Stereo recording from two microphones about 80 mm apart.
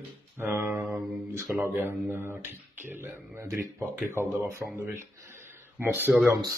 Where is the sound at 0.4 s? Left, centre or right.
Right.